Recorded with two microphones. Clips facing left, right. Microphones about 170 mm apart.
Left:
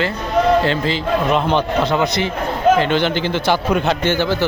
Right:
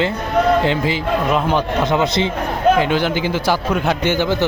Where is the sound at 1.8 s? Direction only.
20° right (ahead or behind).